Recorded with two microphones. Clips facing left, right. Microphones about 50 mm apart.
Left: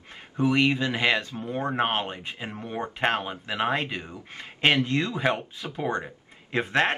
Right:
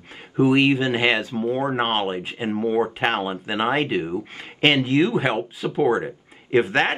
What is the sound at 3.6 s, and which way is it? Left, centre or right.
Speech, right.